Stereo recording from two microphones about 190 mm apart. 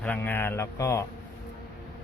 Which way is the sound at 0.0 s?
10° left (ahead or behind).